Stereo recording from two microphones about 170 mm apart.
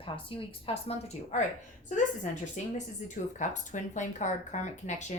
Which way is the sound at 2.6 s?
45° left (ahead or behind).